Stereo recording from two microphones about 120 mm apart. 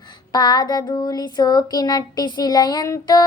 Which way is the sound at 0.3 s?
35° left (ahead or behind).